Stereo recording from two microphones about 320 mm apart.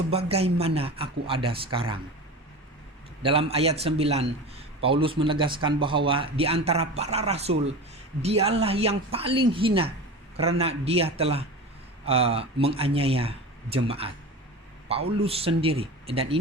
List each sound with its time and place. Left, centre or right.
0.3 s a man's voice: centre
3.2 s a man's voice: centre